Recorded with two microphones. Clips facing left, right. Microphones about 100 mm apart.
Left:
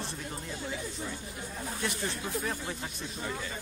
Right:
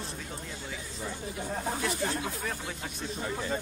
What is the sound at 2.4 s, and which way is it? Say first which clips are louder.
Speech: left 1 dB; 5° left (ahead or behind).